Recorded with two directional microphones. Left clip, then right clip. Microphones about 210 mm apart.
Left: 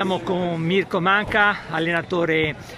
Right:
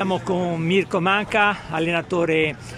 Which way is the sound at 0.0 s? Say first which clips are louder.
Even; 5° right (ahead or behind).